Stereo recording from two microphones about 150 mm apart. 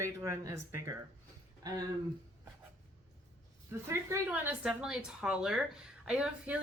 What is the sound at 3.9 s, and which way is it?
A woman's voice, 15° right (ahead or behind).